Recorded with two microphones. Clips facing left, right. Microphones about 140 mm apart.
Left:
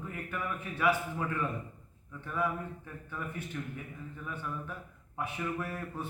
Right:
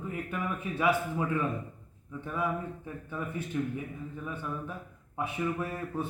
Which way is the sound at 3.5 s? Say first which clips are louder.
Right 7 dB; 15° right (ahead or behind).